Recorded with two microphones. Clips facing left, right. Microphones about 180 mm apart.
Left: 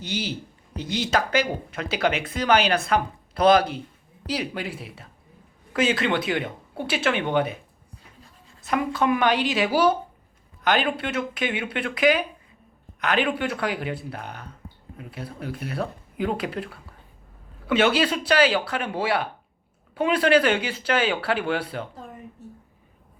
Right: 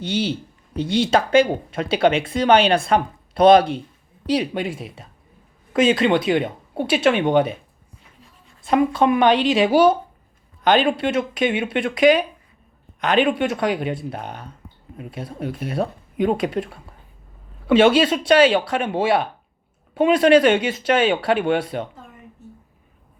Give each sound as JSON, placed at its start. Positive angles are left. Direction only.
{"t": 0.0, "sound": "speech", "side_deg": -30}
{"t": 8.6, "sound": "speech", "side_deg": -25}